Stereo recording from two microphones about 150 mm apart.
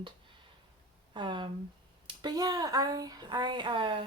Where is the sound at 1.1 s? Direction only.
30° right (ahead or behind).